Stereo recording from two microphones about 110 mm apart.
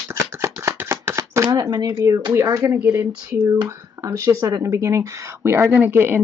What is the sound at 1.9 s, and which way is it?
Speech, 25° right (ahead or behind).